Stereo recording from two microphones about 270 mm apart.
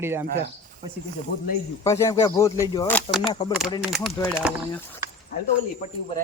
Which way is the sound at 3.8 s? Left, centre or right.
Centre.